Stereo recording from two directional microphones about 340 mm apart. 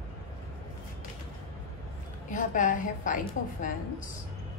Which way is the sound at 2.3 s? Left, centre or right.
Left.